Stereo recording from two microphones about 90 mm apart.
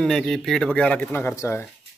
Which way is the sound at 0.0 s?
5° left (ahead or behind).